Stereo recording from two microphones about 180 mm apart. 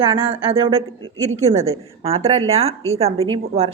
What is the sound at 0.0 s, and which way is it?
A woman's voice, 30° right (ahead or behind).